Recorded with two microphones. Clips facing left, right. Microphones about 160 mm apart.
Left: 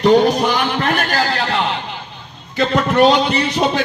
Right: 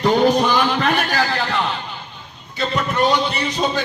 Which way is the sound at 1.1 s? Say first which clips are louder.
Left 2 dB; 70° left (ahead or behind).